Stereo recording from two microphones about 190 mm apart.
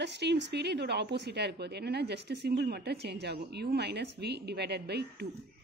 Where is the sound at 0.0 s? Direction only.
65° right (ahead or behind).